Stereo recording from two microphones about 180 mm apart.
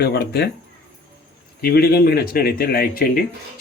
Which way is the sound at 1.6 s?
60° left (ahead or behind).